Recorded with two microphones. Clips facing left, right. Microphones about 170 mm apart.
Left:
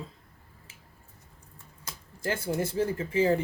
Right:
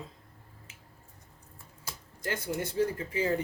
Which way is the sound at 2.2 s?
30° left (ahead or behind).